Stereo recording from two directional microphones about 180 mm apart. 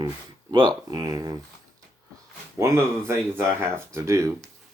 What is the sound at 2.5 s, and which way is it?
Speech, 15° right (ahead or behind).